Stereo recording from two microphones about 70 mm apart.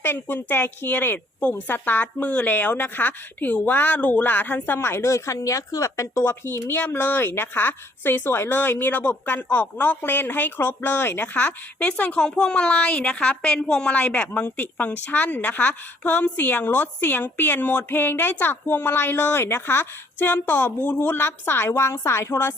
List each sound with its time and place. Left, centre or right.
0.0 s a woman's voice: left